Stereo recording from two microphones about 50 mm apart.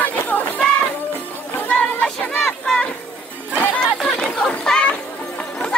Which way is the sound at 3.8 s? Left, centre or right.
Centre.